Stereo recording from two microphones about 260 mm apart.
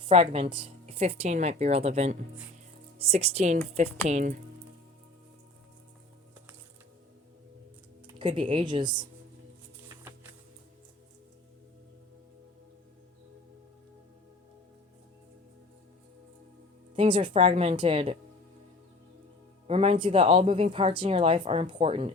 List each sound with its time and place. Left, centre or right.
0.0 s a woman's voice: right
8.0 s speech: centre
16.9 s a woman's voice: centre
19.6 s a woman's voice: right